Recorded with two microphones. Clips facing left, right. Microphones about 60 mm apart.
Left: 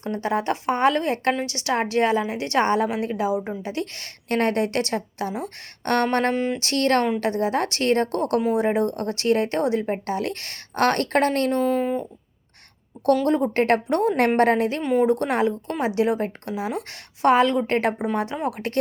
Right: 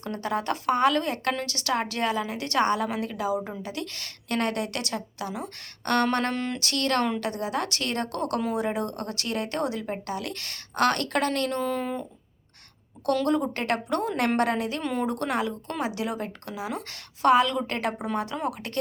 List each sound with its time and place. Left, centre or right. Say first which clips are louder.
0.0 s a woman's voice: left 5 dB; left
6.3 s speech: left 6 dB; centre
6.6 s speech: left 4 dB; left
11.6 s speech: left 6 dB; centre
13.2 s speech: left 5 dB; left
14.8 s speech: left 8 dB; centre
15.1 s speech: left 6 dB; left
18.0 s a woman's voice: left 4 dB; left